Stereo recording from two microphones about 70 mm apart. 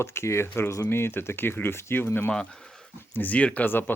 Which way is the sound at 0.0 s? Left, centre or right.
Left.